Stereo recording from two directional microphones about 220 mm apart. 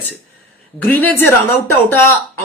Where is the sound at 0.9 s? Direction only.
10° left (ahead or behind).